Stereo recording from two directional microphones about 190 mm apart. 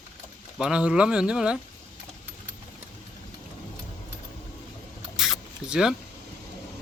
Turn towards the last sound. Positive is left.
turn(degrees=-5)  # may be behind; listen again after turning